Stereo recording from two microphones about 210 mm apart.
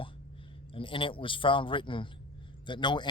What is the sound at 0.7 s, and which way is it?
Speech, 25° left (ahead or behind).